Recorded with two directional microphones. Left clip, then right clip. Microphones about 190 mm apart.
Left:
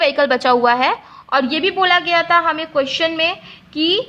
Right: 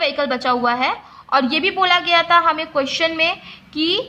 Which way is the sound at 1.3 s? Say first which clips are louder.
Even; 15° left (ahead or behind).